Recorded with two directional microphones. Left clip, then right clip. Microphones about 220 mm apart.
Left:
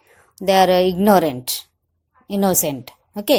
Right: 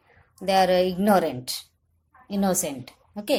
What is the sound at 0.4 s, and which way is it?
A woman's voice, 35° left (ahead or behind).